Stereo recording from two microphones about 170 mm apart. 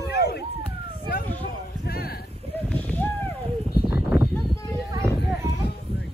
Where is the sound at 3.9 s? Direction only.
10° right (ahead or behind).